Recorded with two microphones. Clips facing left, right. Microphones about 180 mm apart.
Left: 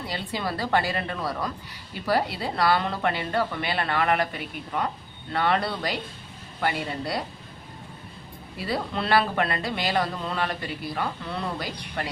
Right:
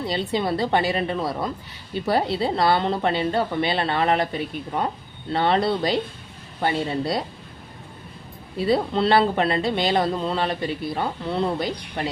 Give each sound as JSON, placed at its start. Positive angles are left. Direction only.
{"t": 0.1, "sound": "a woman's voice", "side_deg": -25}
{"t": 8.5, "sound": "a woman's voice", "side_deg": -25}